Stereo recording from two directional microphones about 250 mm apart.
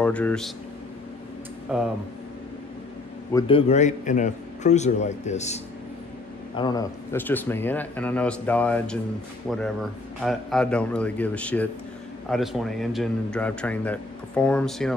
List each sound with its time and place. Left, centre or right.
0.0 s speech: centre
1.7 s speech: centre
3.3 s a man's voice: left
6.5 s speech: centre